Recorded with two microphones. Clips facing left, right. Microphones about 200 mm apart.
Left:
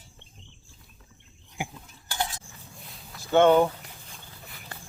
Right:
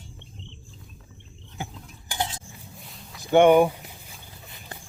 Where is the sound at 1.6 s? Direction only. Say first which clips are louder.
Left 1 dB; 15° left (ahead or behind).